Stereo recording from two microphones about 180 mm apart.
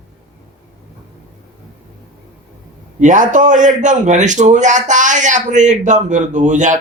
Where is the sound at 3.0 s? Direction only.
45° right (ahead or behind).